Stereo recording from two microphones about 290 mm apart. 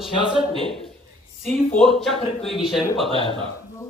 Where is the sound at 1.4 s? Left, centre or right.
Centre.